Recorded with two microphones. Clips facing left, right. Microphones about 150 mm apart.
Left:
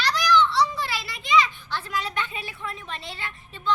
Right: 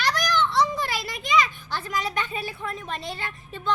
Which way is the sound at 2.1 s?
40° right (ahead or behind).